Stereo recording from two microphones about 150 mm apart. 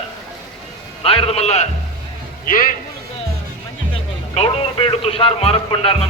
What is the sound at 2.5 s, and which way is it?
Speech, 65° left (ahead or behind).